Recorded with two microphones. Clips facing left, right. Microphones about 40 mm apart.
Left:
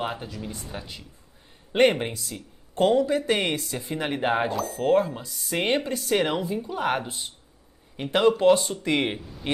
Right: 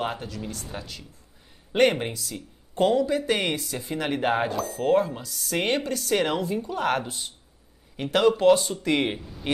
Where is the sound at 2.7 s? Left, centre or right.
Left.